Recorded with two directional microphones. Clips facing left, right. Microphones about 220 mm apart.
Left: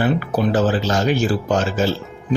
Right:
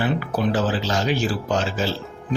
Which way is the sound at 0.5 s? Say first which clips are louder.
Left 6 dB; 50° left (ahead or behind).